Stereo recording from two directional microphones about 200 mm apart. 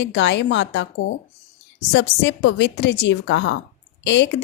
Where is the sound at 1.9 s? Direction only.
60° left (ahead or behind).